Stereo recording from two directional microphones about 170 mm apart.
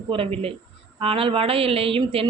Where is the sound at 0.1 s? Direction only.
30° right (ahead or behind).